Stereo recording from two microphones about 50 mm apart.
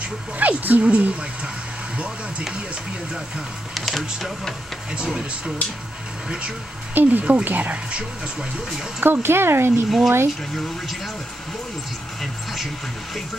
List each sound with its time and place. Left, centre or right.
0.0 s speech: right
2.7 s speech: centre
3.7 s speech: centre
4.9 s speech: centre
6.9 s speech: right
9.0 s speech: right
9.8 s speech: centre